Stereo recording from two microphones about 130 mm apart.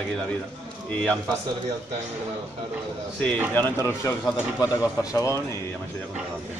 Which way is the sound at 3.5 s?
15° left (ahead or behind).